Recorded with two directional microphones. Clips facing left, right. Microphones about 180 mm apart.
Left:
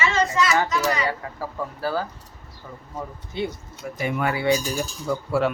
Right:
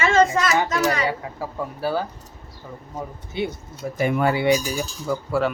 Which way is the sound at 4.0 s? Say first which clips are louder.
Right 5 dB; 50° right (ahead or behind).